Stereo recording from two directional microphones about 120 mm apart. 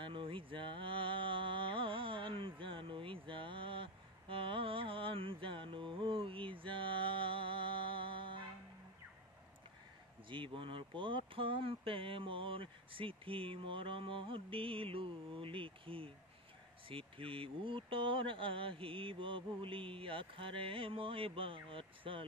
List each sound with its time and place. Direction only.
0.0 s mantra: 45° right (ahead or behind)
10.3 s speech: 45° right (ahead or behind)